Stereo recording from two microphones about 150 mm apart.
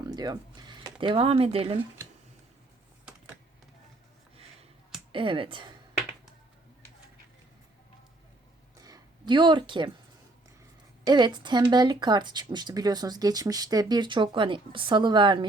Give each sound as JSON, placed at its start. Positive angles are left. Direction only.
{"t": 0.0, "sound": "speech", "side_deg": -25}
{"t": 5.1, "sound": "speech", "side_deg": -35}
{"t": 8.8, "sound": "a sound", "side_deg": -30}
{"t": 11.0, "sound": "speech", "side_deg": -30}